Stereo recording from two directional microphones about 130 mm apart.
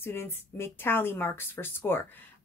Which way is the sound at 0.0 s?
20° left (ahead or behind).